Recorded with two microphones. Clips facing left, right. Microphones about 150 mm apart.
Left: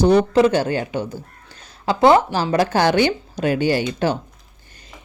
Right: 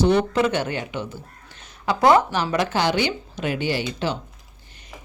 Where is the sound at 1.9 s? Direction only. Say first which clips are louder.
Left 3 dB; 25° left (ahead or behind); by 4.2 s 45° left (ahead or behind).